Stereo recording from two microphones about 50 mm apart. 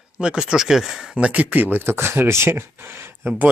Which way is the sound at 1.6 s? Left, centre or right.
Right.